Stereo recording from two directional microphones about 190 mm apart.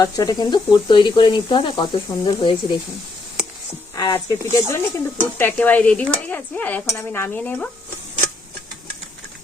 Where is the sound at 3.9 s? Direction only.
20° left (ahead or behind).